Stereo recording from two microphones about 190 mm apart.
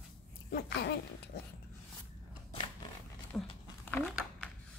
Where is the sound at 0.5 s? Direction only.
60° left (ahead or behind).